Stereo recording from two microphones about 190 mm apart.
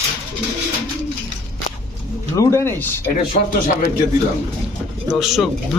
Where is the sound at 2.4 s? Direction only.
15° left (ahead or behind).